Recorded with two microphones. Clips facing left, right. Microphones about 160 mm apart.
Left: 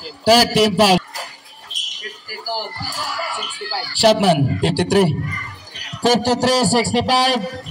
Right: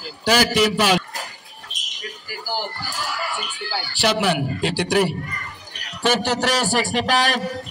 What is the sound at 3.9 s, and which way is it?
A man's voice, 35° left (ahead or behind).